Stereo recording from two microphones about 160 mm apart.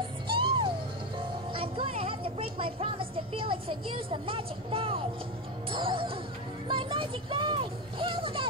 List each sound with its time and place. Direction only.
0.3 s music: 30° right (ahead or behind)
6.7 s a child's voice: 30° right (ahead or behind)